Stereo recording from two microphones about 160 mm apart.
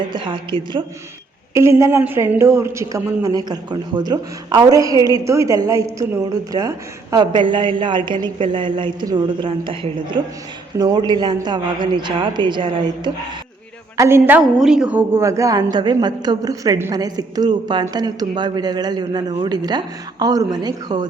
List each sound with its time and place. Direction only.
0.1 s a woman's voice: 30° right (ahead or behind)
1.5 s a woman's voice: 15° right (ahead or behind)
13.9 s a woman's voice: 15° right (ahead or behind)